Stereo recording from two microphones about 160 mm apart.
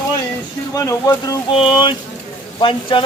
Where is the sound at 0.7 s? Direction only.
20° left (ahead or behind).